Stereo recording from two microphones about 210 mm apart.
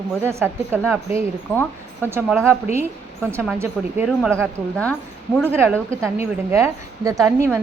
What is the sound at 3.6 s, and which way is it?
Speech, 10° right (ahead or behind).